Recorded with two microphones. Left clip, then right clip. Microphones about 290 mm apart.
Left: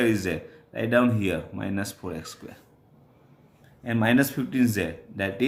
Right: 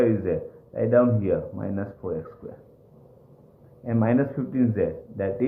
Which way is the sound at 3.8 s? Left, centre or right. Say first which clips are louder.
Left 1 dB; left.